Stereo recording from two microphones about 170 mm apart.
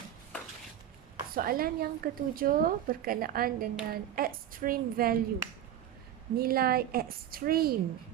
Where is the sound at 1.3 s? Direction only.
60° right (ahead or behind).